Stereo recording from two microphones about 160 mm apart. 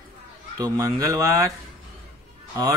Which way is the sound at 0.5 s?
20° right (ahead or behind).